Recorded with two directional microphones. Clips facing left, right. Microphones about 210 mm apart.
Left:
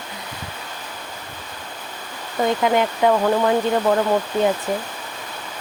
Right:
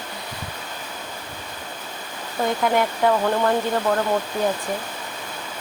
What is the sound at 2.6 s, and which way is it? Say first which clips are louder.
Speech: left 1 dB; 5° left (ahead or behind).